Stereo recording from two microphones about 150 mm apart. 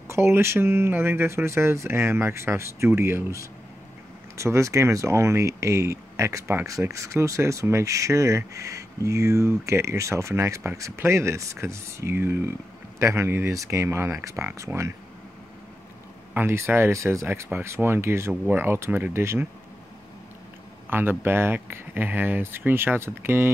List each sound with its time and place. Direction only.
0.1 s speech: 15° right (ahead or behind)
16.3 s speech: 15° right (ahead or behind)
20.9 s speech: 15° right (ahead or behind)